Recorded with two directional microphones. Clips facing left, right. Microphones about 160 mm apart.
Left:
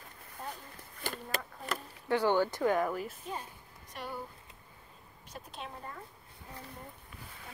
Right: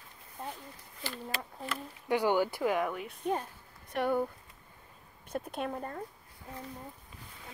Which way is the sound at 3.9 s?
60° right (ahead or behind).